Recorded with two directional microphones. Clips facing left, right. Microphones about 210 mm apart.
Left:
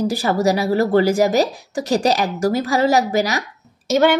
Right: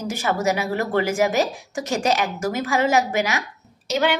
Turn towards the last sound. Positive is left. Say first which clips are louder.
# left 6 dB
turn(degrees=45)  # may be behind; listen again after turning